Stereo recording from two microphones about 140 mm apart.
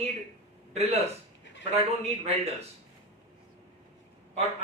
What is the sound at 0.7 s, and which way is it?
Speech, 50° right (ahead or behind).